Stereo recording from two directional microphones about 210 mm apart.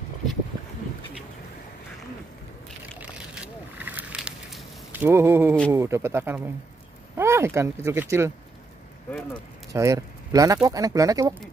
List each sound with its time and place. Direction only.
3.0 s a sound: 5° right (ahead or behind)
5.7 s speech: 15° right (ahead or behind)
9.7 s speech: 15° right (ahead or behind)